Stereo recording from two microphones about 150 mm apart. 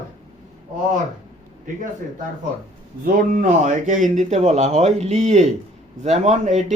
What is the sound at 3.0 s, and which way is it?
A man's voice, 60° right (ahead or behind).